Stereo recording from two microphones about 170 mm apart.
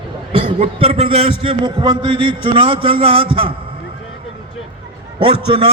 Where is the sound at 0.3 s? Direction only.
35° right (ahead or behind).